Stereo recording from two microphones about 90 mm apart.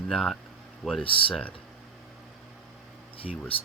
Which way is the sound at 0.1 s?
5° left (ahead or behind).